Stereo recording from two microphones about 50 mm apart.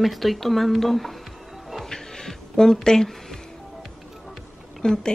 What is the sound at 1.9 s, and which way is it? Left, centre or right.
Music, centre.